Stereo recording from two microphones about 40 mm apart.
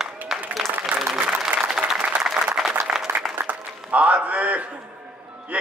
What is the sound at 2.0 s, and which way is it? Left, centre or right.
Applause, right.